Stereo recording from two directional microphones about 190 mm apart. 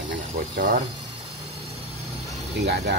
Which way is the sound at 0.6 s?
45° right (ahead or behind).